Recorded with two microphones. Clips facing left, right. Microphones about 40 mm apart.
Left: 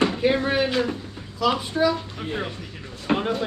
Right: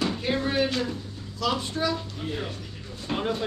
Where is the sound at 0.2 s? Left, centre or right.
Left.